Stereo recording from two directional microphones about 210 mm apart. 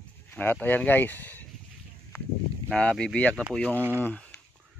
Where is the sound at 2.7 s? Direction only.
5° left (ahead or behind).